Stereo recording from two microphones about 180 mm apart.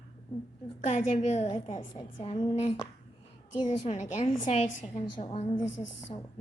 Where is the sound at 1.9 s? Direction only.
25° left (ahead or behind).